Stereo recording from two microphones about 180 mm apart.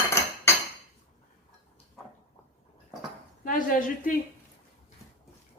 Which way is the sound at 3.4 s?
50° left (ahead or behind).